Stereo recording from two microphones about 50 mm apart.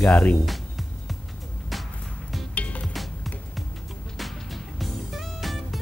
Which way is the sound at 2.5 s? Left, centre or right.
Left.